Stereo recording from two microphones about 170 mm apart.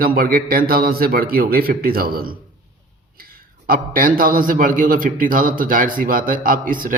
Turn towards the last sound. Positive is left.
turn(degrees=-55)  # may be behind; listen again after turning